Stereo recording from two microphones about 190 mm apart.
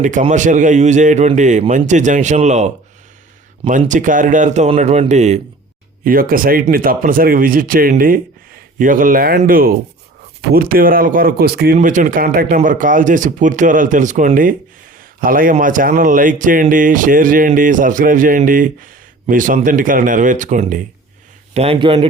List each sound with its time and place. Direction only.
0.0 s a man's voice: 40° right (ahead or behind)
6.1 s speech: 50° right (ahead or behind); by 22.0 s 25° right (ahead or behind)